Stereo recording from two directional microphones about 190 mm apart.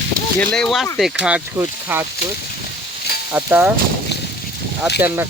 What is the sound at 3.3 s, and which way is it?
Speech, 10° right (ahead or behind).